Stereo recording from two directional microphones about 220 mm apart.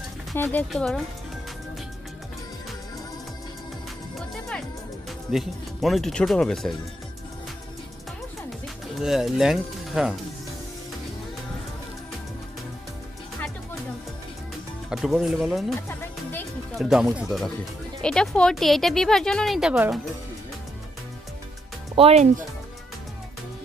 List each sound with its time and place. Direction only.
0.3 s speech: 10° left (ahead or behind)
5.3 s speech: centre (ahead or behind)
9.0 s speech: centre (ahead or behind)
14.9 s speech: centre (ahead or behind)
16.0 s music: 10° left (ahead or behind)
16.8 s speech: centre (ahead or behind)
21.9 s speech: 30° right (ahead or behind)